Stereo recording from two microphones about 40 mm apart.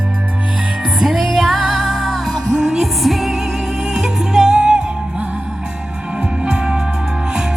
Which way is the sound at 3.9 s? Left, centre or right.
Centre.